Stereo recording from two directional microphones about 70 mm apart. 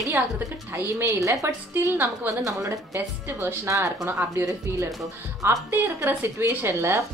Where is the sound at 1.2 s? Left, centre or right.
Right.